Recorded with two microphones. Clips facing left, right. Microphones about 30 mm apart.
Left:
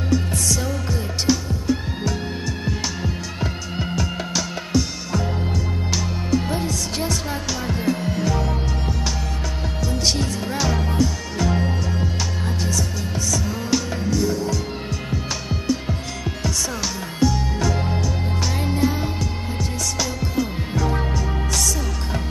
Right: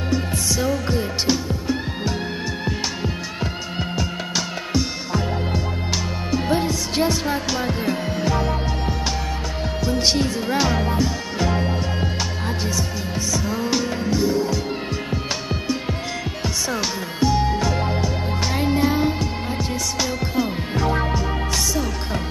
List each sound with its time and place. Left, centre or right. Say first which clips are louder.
0.3 s music: right 2 dB; centre
2.6 s music: right 1 dB; centre
16.4 s music: right 1 dB; right